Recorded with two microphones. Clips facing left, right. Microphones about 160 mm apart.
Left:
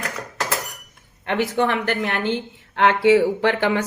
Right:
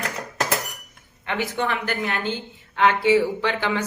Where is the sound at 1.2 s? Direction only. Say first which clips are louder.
Left 5 dB; 55° left (ahead or behind).